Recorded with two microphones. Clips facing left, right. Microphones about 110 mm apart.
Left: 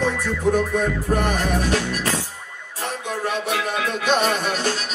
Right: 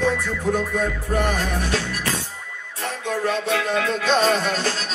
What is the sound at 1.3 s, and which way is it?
Music, 20° left (ahead or behind).